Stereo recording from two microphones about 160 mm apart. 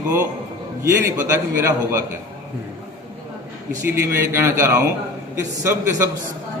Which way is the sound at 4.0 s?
15° right (ahead or behind).